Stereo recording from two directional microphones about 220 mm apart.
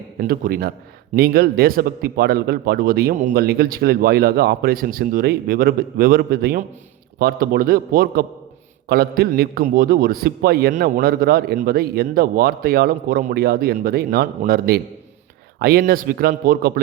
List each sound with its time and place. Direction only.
0.2 s a man's voice: 40° right (ahead or behind)